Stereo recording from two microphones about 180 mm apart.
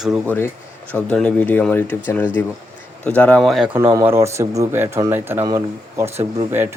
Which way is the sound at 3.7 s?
20° right (ahead or behind).